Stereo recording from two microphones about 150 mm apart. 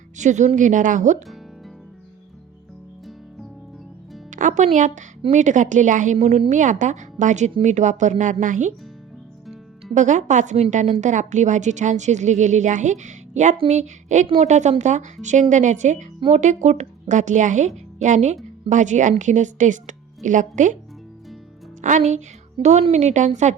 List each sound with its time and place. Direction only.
0.2 s a woman's voice: 55° right (ahead or behind)
4.3 s a woman's voice: 55° right (ahead or behind)
9.9 s a woman's voice: 55° right (ahead or behind)
21.8 s a woman's voice: 55° right (ahead or behind)